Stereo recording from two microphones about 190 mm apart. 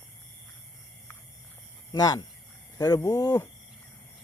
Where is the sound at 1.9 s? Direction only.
20° left (ahead or behind).